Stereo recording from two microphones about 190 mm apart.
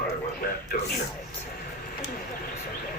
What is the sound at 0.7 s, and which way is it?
Speech, 50° left (ahead or behind).